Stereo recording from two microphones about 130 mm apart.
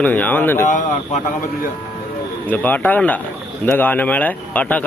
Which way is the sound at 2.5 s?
15° left (ahead or behind).